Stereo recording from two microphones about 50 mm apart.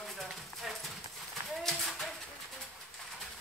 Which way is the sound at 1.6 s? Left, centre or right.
Centre.